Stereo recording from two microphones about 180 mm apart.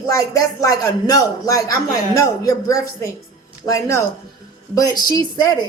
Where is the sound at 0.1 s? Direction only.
20° left (ahead or behind).